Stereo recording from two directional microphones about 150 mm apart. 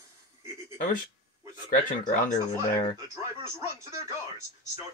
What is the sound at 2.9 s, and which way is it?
Radio, 20° right (ahead or behind).